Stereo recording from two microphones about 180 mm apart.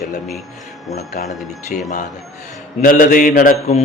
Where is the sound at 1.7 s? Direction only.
50° left (ahead or behind).